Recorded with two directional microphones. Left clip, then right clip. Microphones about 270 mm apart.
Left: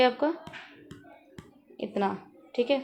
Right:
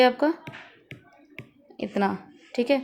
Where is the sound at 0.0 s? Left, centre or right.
Right.